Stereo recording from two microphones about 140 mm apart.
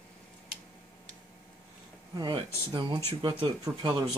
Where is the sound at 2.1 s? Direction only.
30° right (ahead or behind).